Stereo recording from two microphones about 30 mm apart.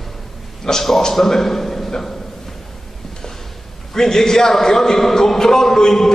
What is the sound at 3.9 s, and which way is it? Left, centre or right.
A man's voice, centre.